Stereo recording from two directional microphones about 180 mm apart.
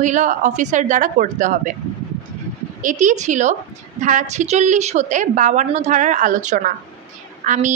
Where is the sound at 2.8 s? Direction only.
45° right (ahead or behind).